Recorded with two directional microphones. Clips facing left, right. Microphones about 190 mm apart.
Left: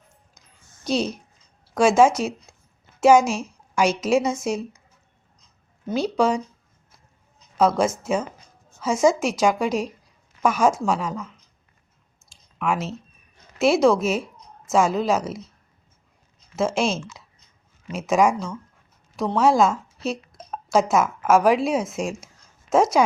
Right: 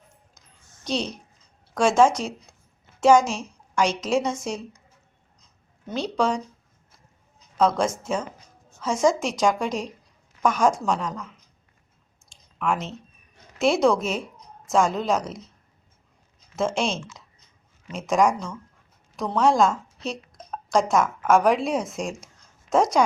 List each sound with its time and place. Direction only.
0.9 s a woman's voice: 10° left (ahead or behind)
5.8 s a woman's voice: 10° left (ahead or behind)
7.5 s a woman's voice: 5° left (ahead or behind)
12.3 s clicking: 5° left (ahead or behind)
13.6 s speech: 5° left (ahead or behind)
16.6 s a woman's voice: 5° left (ahead or behind)